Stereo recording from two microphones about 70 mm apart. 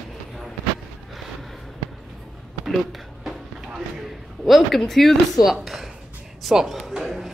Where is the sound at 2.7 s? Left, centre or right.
Centre.